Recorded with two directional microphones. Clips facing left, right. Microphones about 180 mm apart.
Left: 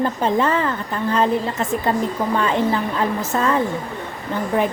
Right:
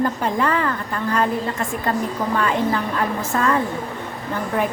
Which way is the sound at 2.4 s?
20° left (ahead or behind).